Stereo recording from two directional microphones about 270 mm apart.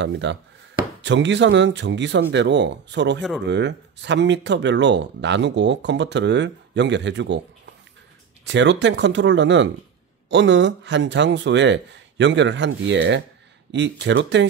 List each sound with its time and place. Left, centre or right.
0.0 s speech: right